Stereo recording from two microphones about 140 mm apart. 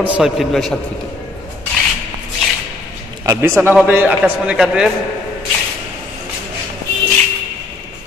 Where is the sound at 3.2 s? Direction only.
20° right (ahead or behind); by 4.9 s 5° right (ahead or behind).